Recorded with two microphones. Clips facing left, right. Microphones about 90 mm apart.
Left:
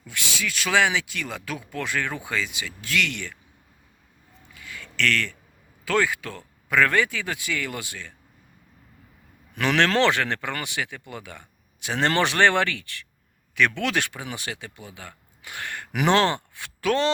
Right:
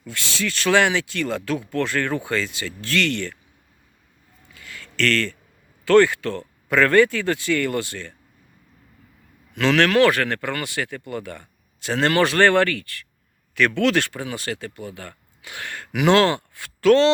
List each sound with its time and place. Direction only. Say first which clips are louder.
0.0 s speech: right 3 dB; 10° left (ahead or behind)
4.5 s a sound: right 2 dB; 10° left (ahead or behind)
5.8 s speech: right 9 dB; 10° left (ahead or behind)
9.6 s speech: right 4 dB; 20° left (ahead or behind)